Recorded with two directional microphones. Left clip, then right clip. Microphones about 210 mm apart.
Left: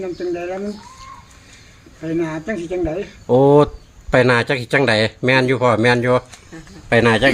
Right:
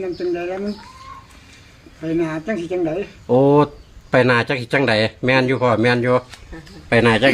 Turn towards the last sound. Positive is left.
turn(degrees=15)  # may be behind; listen again after turning